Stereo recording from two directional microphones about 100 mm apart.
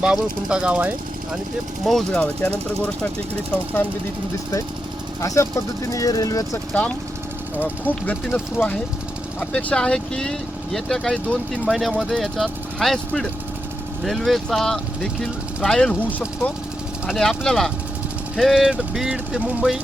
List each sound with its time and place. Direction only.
0.0 s speech: 10° right (ahead or behind)
1.8 s speech: 5° left (ahead or behind)
5.2 s speech: 30° left (ahead or behind)
7.6 s speech: 15° left (ahead or behind)
17.2 s speech: 5° left (ahead or behind); by 19.6 s 15° right (ahead or behind)